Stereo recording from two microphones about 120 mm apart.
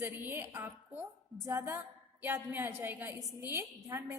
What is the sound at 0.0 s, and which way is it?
A woman's voice, 20° right (ahead or behind).